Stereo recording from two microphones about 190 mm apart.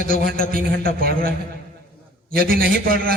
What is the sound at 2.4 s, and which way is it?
Speech, 50° right (ahead or behind).